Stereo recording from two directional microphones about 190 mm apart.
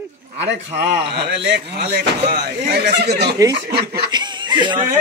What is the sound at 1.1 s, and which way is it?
Speech, 65° right (ahead or behind).